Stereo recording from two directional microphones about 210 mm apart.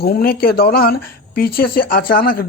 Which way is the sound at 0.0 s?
45° left (ahead or behind).